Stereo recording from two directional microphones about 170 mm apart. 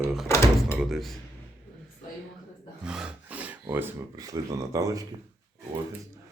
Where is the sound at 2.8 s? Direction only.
5° right (ahead or behind).